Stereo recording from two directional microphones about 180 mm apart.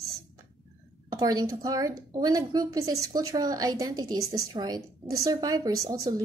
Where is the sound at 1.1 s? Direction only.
20° right (ahead or behind).